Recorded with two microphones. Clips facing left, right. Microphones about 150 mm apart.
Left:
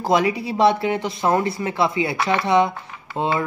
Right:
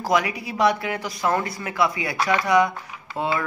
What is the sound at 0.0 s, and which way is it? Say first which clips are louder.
Speech: left 4 dB; 30° left (ahead or behind).